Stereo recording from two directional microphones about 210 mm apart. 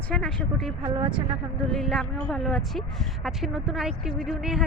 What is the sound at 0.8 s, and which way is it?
Speech, 20° right (ahead or behind).